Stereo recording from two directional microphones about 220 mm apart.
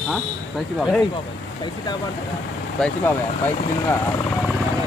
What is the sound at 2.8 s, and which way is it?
Speech, 10° left (ahead or behind).